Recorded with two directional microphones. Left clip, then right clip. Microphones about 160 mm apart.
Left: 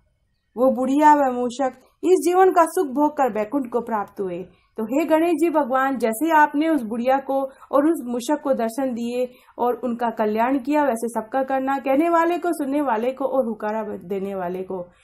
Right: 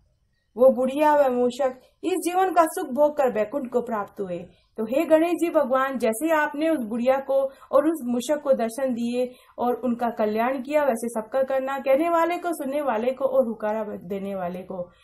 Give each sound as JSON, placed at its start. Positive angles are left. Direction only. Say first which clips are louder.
{"t": 0.6, "sound": "a woman's voice", "louder": "even", "side_deg": 35}